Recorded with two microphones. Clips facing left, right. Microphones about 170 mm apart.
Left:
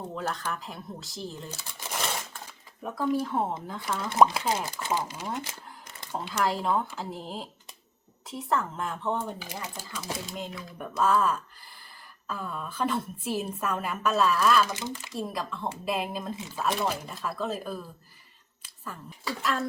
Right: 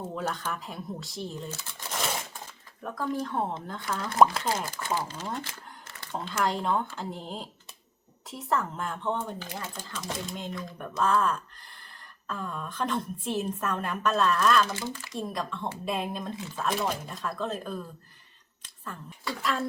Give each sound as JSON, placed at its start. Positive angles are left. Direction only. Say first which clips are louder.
{"t": 0.0, "sound": "speech", "louder": "even", "side_deg": 0}
{"t": 1.5, "sound": "speech", "louder": "right 1 dB", "side_deg": 10}
{"t": 4.4, "sound": "speech", "louder": "left 1 dB", "side_deg": 15}
{"t": 14.7, "sound": "speech", "louder": "even", "side_deg": 20}
{"t": 15.1, "sound": "speech", "louder": "even", "side_deg": 5}
{"t": 19.3, "sound": "speech", "louder": "left 1 dB", "side_deg": 0}